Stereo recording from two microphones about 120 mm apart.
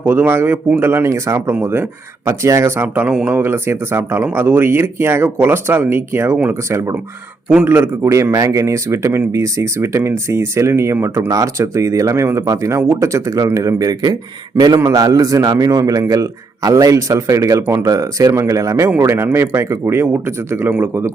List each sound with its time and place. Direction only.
0.0 s a man's voice: 15° right (ahead or behind)